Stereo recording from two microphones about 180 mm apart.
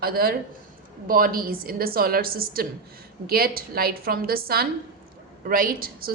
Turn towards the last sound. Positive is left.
turn(degrees=-55)  # may be behind; listen again after turning